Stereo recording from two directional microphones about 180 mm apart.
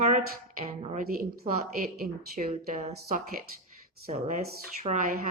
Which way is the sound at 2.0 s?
55° right (ahead or behind).